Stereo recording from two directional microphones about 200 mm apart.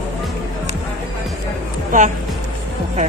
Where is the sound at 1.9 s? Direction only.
40° right (ahead or behind).